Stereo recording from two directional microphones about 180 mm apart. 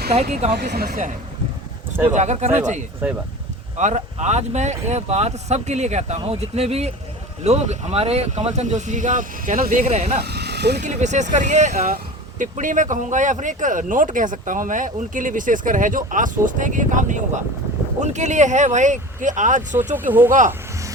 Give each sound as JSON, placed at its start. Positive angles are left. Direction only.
{"t": 0.1, "sound": "speech", "side_deg": -35}
{"t": 0.5, "sound": "speech", "side_deg": -60}
{"t": 2.1, "sound": "speech", "side_deg": -40}
{"t": 10.2, "sound": "speech", "side_deg": -65}
{"t": 10.8, "sound": "speech", "side_deg": -40}
{"t": 20.1, "sound": "speech", "side_deg": -10}